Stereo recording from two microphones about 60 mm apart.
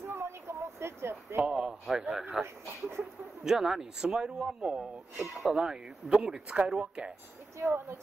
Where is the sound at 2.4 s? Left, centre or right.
Centre.